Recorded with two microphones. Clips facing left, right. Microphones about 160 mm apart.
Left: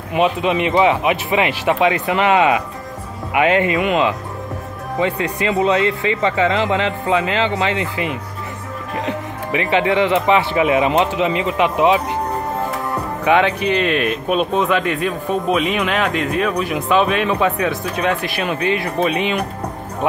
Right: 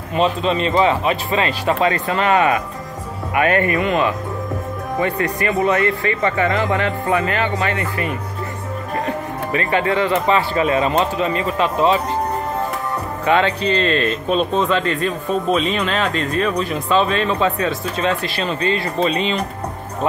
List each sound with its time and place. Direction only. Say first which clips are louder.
0.1 s a man's voice: left 1 dB; 15° left (ahead or behind)
13.2 s a man's voice: left 1 dB; 10° left (ahead or behind)